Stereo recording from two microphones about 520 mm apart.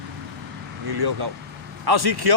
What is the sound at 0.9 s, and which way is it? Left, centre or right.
Speech, right.